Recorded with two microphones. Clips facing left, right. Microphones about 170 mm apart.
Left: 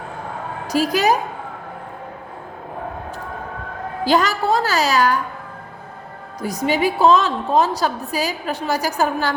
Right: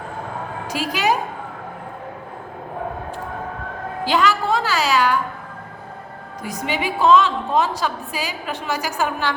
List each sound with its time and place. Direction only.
0.7 s a woman's voice: 40° left (ahead or behind)
4.0 s a woman's voice: 40° left (ahead or behind)
6.4 s a woman's voice: 40° left (ahead or behind)